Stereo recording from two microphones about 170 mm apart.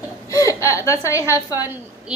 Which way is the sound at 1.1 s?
15° left (ahead or behind).